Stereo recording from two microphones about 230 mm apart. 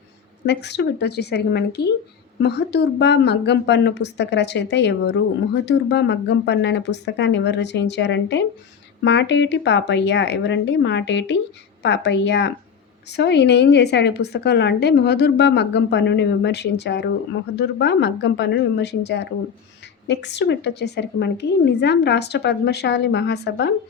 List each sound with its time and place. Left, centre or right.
0.4 s a woman's voice: left